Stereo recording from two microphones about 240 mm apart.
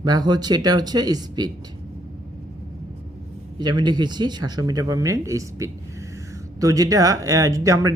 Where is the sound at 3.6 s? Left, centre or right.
Centre.